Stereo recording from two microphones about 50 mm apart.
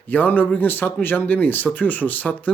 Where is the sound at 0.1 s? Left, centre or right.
Left.